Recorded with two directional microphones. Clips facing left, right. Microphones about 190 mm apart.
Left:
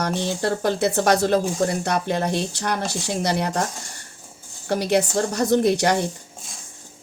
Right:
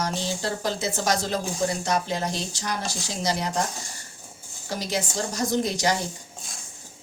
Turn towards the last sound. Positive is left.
turn(degrees=60)  # may be behind; listen again after turning